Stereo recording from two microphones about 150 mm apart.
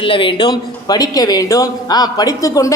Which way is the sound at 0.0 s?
35° left (ahead or behind).